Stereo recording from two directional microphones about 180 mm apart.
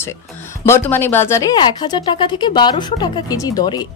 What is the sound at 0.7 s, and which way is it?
Speech, 10° left (ahead or behind).